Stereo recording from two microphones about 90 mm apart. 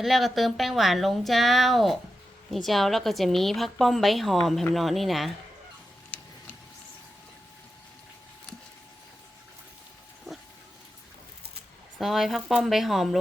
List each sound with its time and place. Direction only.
0.0 s a woman's voice: centre (ahead or behind)
6.1 s tick-tock: 15° left (ahead or behind)
11.9 s a woman's voice: centre (ahead or behind)